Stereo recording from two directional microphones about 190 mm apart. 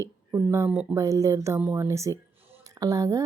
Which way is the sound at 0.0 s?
15° right (ahead or behind).